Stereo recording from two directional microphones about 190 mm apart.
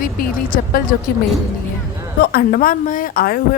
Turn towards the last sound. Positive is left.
turn(degrees=50)  # may be behind; listen again after turning